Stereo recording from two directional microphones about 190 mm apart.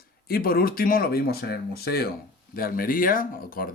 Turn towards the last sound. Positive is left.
turn(degrees=50)  # may be behind; listen again after turning